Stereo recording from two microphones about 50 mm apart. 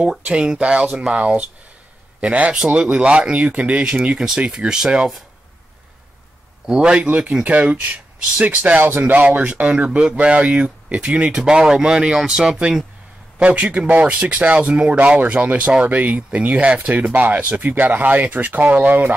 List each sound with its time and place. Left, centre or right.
0.2 s speech: centre
2.5 s speech: centre
6.6 s speech: centre; by 19.1 s right